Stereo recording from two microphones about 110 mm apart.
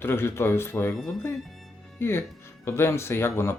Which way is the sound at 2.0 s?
20° left (ahead or behind).